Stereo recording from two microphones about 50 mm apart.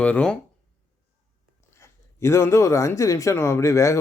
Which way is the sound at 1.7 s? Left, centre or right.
Left.